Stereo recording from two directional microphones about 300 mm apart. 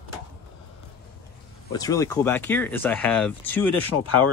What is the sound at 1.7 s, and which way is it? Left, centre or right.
Speech, centre.